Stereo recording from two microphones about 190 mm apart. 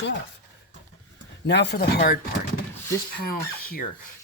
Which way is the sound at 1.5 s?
60° left (ahead or behind).